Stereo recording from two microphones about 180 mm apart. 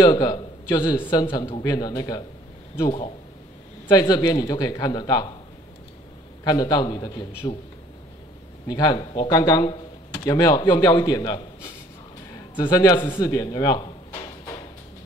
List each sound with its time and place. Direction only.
0.0 s a man's voice: 25° left (ahead or behind)
3.8 s speech: 20° left (ahead or behind)
6.4 s speech: 20° left (ahead or behind)
8.6 s speech: 20° left (ahead or behind)
12.5 s speech: 25° left (ahead or behind)